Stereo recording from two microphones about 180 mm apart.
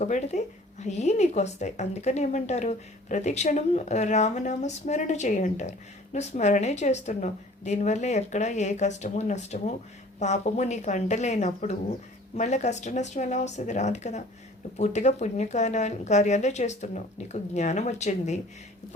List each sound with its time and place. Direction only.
0.0 s speech: 40° left (ahead or behind)